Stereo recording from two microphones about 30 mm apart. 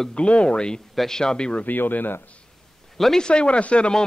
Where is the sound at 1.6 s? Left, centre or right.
Left.